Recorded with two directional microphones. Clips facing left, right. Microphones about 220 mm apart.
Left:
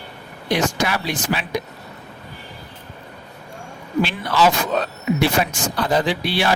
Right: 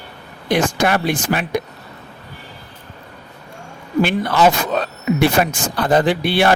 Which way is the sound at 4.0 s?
55° right (ahead or behind).